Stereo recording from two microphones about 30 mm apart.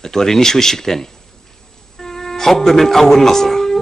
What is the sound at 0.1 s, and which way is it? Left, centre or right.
Speech, centre.